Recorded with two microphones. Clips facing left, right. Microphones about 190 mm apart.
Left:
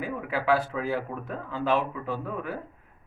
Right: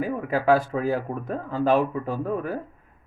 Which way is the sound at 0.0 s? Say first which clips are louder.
Right 6 dB; 45° right (ahead or behind).